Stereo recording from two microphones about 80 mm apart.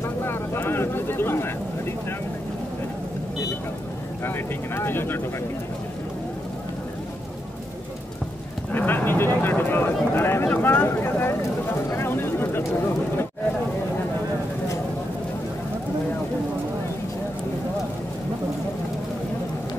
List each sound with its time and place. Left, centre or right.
0.0 s vehicle: left
4.2 s speech: left
8.7 s speech: left
11.9 s a sound: left